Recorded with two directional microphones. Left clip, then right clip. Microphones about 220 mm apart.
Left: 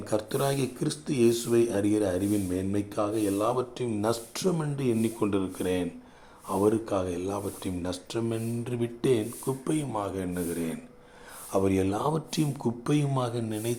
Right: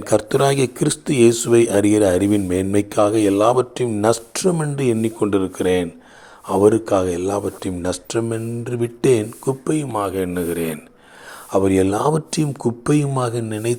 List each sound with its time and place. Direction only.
0.0 s speech: 30° right (ahead or behind)